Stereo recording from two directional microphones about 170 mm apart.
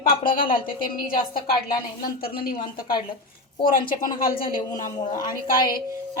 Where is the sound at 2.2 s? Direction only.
60° left (ahead or behind).